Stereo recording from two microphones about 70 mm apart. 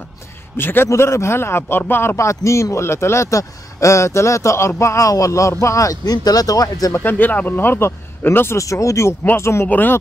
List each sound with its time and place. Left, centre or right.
0.6 s speech: left
2.1 s a man's voice: left
6.9 s speech: left
8.5 s a man's voice: left
9.7 s speech: left